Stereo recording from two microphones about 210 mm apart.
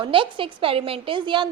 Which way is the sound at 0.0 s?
25° right (ahead or behind).